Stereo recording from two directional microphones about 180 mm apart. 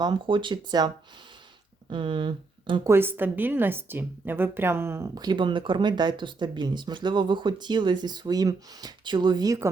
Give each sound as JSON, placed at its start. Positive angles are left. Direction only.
{"t": 0.0, "sound": "a woman's voice", "side_deg": -25}
{"t": 1.9, "sound": "speech", "side_deg": -30}
{"t": 2.9, "sound": "a woman's voice", "side_deg": -10}